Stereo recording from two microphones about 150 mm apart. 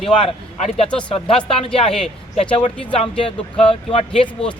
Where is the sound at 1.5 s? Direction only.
40° left (ahead or behind).